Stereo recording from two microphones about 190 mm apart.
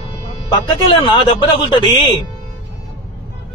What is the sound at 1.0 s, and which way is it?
Speech, 25° left (ahead or behind).